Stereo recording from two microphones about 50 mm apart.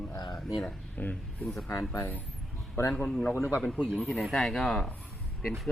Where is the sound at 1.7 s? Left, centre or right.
Left.